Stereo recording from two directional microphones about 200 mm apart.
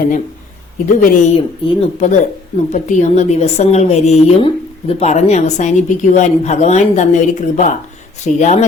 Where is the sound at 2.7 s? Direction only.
35° left (ahead or behind).